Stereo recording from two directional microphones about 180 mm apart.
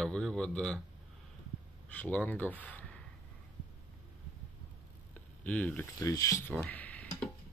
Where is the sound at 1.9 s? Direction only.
10° left (ahead or behind).